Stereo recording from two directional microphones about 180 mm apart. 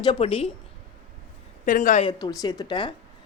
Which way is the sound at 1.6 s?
45° left (ahead or behind).